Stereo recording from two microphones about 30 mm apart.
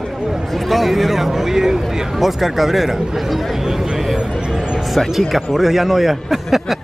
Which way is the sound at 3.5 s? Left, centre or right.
Centre.